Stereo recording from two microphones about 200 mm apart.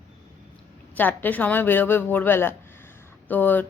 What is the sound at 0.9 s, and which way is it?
A woman's voice, 10° left (ahead or behind).